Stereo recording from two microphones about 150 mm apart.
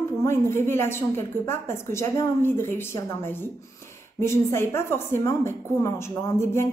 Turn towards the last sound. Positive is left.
turn(degrees=15)  # may be behind; listen again after turning